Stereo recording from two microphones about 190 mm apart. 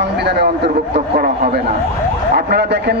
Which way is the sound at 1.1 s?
50° right (ahead or behind).